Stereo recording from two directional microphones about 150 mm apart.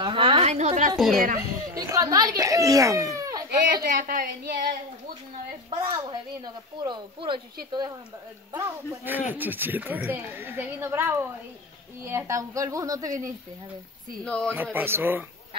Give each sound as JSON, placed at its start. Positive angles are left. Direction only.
{"t": 0.0, "sound": "a sound", "side_deg": -35}
{"t": 0.9, "sound": "a woman's voice", "side_deg": 0}
{"t": 1.8, "sound": "a child's voice", "side_deg": -25}
{"t": 3.7, "sound": "a woman's voice", "side_deg": -65}
{"t": 5.9, "sound": "speech", "side_deg": -30}
{"t": 8.6, "sound": "a woman's voice", "side_deg": -15}
{"t": 14.2, "sound": "speech", "side_deg": 5}
{"t": 14.5, "sound": "a woman's voice", "side_deg": -15}